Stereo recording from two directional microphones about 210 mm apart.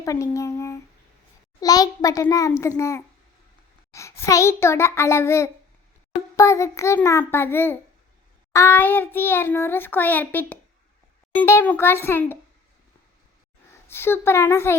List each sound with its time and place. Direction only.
0.0 s a child's voice: 15° left (ahead or behind)
13.8 s a child's voice: 10° left (ahead or behind)